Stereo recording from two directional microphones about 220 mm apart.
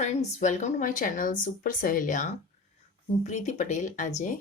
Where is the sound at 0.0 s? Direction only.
30° left (ahead or behind).